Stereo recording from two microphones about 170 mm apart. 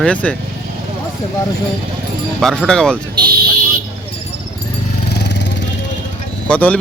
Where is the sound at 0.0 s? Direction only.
5° left (ahead or behind).